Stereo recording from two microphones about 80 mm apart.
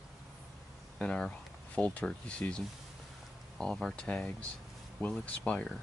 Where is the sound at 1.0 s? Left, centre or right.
Centre.